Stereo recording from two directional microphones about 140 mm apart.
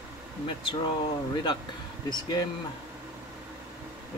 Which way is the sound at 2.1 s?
30° left (ahead or behind).